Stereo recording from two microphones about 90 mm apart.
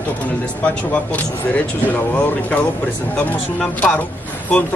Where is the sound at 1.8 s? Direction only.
15° left (ahead or behind).